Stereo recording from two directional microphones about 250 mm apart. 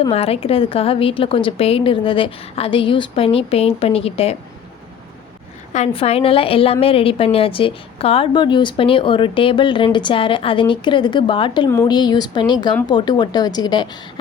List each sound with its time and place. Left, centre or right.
0.0 s a woman's voice: left
5.7 s a woman's voice: left